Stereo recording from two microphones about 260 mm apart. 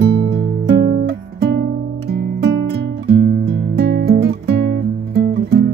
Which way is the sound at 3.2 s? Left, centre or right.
Right.